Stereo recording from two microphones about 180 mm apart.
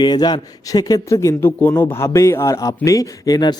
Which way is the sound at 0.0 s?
25° left (ahead or behind).